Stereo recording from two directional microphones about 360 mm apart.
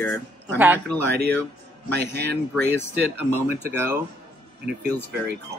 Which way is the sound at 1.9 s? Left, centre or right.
Right.